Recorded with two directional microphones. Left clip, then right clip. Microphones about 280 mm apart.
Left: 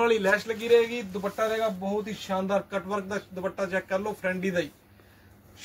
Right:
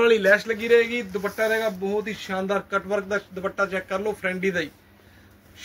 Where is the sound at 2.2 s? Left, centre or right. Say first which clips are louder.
Right 1 dB; centre.